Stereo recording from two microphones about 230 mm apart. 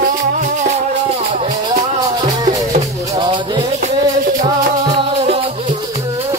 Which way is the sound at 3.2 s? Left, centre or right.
Centre.